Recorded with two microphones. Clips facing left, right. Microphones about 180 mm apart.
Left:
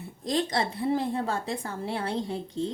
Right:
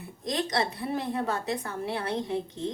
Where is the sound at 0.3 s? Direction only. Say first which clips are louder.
Left 1 dB; 30° left (ahead or behind).